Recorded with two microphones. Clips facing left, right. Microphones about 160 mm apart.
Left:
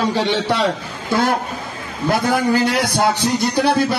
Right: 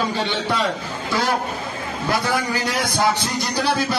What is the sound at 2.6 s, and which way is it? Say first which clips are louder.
Speech: left 5 dB; 70° left (ahead or behind).